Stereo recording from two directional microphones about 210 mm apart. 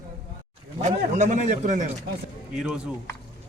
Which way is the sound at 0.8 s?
35° right (ahead or behind).